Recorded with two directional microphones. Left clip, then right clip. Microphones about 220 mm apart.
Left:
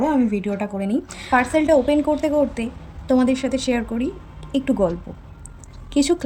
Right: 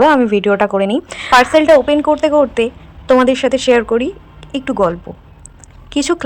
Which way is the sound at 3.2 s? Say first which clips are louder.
Right 8 dB; 5° right (ahead or behind).